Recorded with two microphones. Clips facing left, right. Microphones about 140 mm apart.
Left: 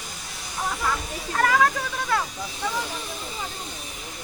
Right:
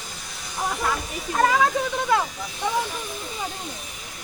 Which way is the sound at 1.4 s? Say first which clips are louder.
Right 1 dB; 20° right (ahead or behind).